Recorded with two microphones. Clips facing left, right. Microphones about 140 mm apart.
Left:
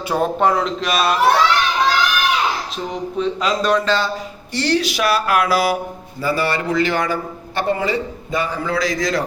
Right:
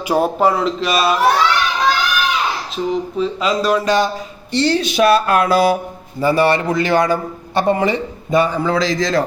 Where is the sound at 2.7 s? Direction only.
Centre (ahead or behind).